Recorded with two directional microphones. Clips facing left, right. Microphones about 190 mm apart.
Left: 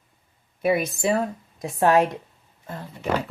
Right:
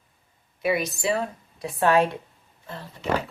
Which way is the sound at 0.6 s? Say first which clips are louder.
Left 3 dB; 50° left (ahead or behind).